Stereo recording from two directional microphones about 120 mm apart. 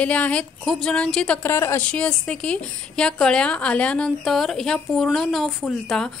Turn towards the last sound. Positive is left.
turn(degrees=0)  # may be behind; listen again after turning